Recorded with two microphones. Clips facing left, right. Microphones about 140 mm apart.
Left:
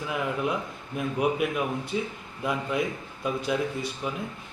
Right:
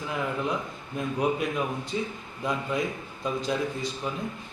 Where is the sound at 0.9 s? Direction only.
10° left (ahead or behind).